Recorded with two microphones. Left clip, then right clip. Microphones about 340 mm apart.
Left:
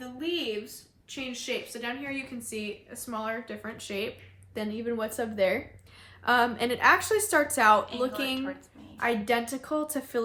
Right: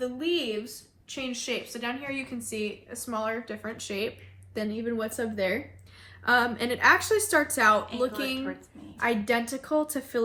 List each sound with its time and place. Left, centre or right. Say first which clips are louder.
0.0 s a woman's voice: right 4 dB; centre